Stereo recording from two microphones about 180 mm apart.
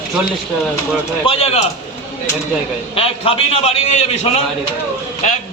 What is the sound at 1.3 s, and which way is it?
Speech, 35° left (ahead or behind).